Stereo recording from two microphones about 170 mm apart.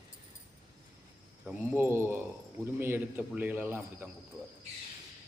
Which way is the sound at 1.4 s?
10° right (ahead or behind).